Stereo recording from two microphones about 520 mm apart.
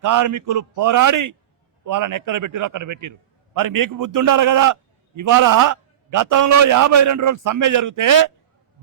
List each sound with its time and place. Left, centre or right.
0.0 s a man's voice: right